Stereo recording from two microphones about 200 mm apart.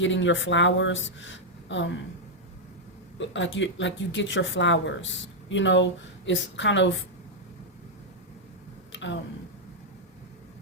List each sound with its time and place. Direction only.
0.0 s speech: 70° left (ahead or behind)
3.2 s speech: 65° left (ahead or behind)
8.9 s a sound: 65° left (ahead or behind)